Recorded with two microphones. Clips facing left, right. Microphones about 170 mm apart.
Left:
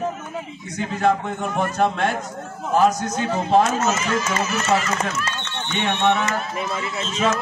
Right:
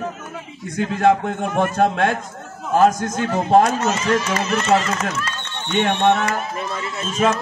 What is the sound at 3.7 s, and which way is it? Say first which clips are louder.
Speech: right 2 dB; 35° right (ahead or behind).